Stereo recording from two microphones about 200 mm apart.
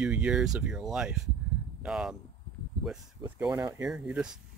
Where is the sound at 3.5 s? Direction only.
20° right (ahead or behind).